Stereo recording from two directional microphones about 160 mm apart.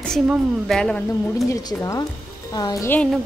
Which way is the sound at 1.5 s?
20° left (ahead or behind).